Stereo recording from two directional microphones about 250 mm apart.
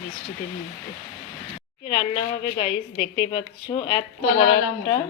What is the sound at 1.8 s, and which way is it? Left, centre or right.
Speech, left.